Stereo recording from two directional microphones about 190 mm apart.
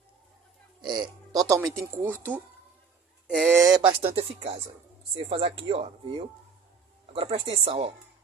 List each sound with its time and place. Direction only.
0.8 s speech: 20° right (ahead or behind)